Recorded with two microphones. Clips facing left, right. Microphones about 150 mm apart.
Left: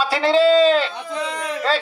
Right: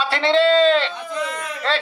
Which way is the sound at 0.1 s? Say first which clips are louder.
Left 1 dB; 10° left (ahead or behind).